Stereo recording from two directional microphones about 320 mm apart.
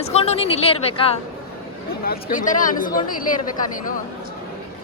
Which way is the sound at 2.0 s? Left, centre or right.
Left.